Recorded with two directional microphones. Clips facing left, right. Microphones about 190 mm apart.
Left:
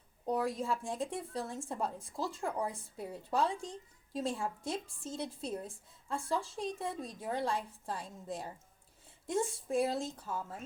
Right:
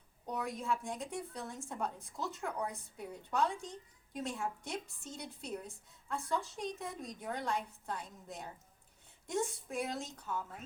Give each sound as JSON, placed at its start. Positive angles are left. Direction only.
{"t": 0.3, "sound": "a woman's voice", "side_deg": 30}